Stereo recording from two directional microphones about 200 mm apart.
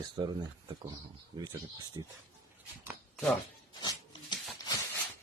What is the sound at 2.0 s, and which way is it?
Speech, 20° right (ahead or behind).